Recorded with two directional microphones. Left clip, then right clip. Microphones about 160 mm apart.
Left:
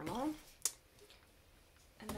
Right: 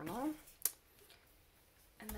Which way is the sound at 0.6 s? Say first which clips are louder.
Left 4 dB; 30° right (ahead or behind).